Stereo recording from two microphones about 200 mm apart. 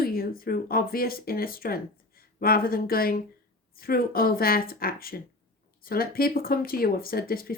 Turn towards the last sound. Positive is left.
turn(degrees=50)  # may be behind; listen again after turning